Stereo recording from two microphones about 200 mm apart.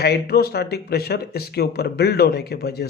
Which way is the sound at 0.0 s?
50° left (ahead or behind).